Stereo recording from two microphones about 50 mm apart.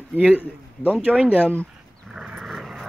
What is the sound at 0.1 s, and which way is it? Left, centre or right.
Speech, right.